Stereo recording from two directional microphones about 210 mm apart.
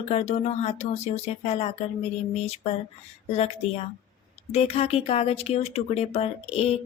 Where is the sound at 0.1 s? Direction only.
30° left (ahead or behind).